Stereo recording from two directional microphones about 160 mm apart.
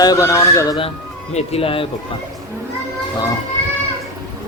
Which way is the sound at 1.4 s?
35° left (ahead or behind).